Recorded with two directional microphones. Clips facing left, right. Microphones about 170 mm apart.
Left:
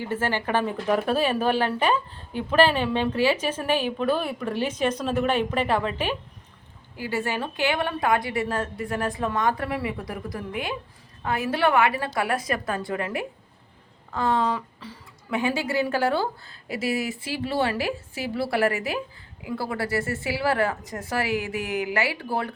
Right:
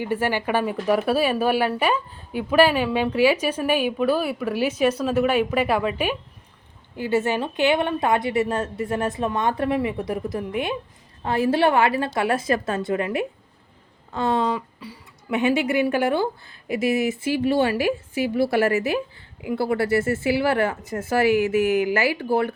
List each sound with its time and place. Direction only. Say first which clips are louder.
0.0 s a woman's voice: right 3 dB; 15° right (ahead or behind)
17.5 s speech: right 3 dB; 30° left (ahead or behind)
18.1 s a woman's voice: right 6 dB; 20° right (ahead or behind)